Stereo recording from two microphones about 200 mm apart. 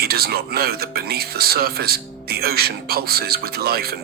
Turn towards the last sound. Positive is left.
turn(degrees=-50)  # may be behind; listen again after turning